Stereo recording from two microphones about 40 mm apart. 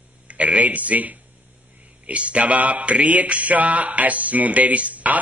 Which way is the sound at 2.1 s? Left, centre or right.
Right.